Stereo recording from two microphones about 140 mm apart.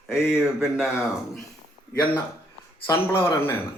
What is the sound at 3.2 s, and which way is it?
Mantra, 20° left (ahead or behind).